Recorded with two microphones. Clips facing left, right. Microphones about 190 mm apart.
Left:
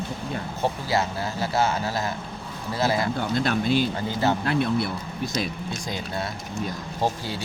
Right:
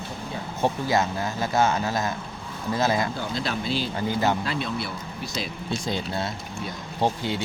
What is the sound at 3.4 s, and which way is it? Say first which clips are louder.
Speech: left 6 dB; 50° left (ahead or behind).